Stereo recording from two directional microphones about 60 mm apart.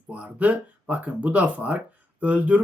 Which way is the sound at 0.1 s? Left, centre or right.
Right.